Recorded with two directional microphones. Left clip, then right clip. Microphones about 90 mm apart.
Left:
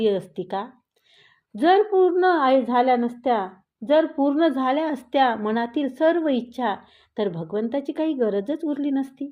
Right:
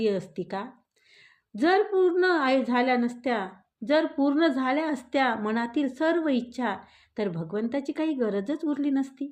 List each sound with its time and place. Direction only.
0.0 s a woman's voice: 20° left (ahead or behind)